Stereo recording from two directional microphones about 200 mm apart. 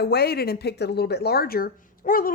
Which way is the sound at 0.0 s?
50° left (ahead or behind).